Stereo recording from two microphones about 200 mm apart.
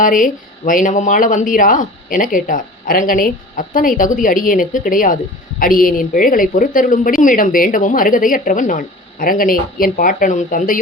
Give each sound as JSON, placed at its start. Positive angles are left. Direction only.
{"t": 0.0, "sound": "a woman's voice", "side_deg": 40}